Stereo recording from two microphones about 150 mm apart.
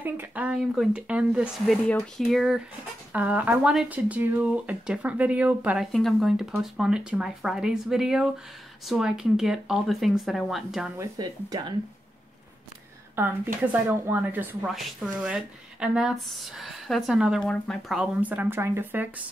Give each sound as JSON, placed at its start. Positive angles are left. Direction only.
{"t": 0.0, "sound": "speech", "side_deg": -10}
{"t": 5.9, "sound": "speech", "side_deg": 0}
{"t": 11.0, "sound": "speech", "side_deg": -25}
{"t": 13.2, "sound": "speech", "side_deg": -15}